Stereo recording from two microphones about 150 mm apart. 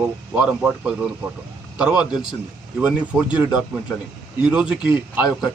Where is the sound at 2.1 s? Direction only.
30° left (ahead or behind).